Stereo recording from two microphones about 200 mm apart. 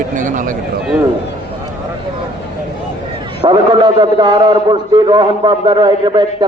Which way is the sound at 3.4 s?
25° right (ahead or behind).